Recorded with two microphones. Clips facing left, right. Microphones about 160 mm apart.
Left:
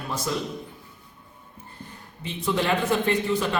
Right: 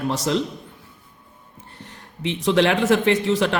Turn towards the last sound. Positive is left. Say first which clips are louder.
# right 5 dB
turn(degrees=-75)  # may be behind; listen again after turning